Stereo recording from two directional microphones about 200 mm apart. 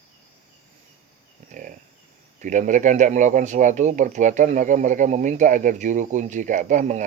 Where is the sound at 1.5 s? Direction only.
40° right (ahead or behind).